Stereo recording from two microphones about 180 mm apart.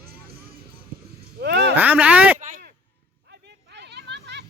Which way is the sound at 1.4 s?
65° right (ahead or behind).